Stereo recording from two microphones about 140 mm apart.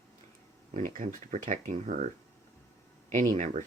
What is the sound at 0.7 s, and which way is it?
Speech, 60° right (ahead or behind).